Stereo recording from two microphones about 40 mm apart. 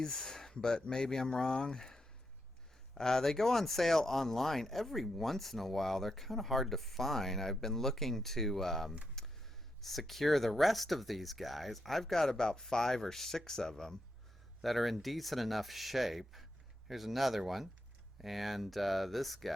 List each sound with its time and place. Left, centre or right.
0.0 s speech: centre
9.2 s a sound: centre
9.8 s speech: centre
14.6 s speech: centre